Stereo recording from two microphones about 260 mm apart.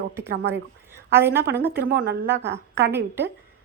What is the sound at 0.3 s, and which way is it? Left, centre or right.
Speech, right.